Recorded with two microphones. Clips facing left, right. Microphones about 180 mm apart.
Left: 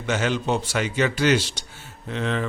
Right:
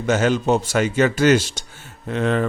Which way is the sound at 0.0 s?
45° right (ahead or behind).